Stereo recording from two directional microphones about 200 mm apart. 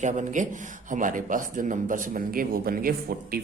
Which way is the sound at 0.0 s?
35° right (ahead or behind).